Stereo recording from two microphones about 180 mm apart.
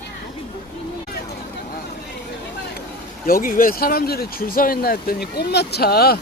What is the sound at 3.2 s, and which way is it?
Speech, 50° left (ahead or behind).